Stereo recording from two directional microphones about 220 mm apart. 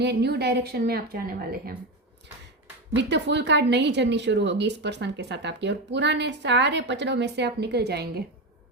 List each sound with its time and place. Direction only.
0.0 s speech: 50° right (ahead or behind)
2.9 s speech: 50° right (ahead or behind)